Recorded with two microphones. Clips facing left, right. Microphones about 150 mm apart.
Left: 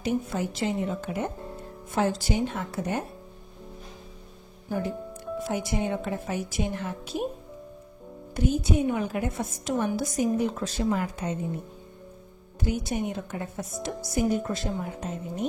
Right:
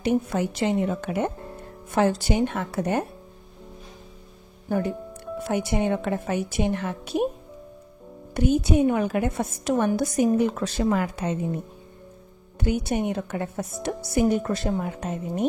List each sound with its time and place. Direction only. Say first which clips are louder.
0.0 s a woman's voice: right 4 dB; 65° right (ahead or behind)
5.5 s a woman's voice: right 5 dB; 65° right (ahead or behind)
8.4 s a woman's voice: right 5 dB; 65° right (ahead or behind)
12.5 s a woman's voice: right 4 dB; 65° right (ahead or behind)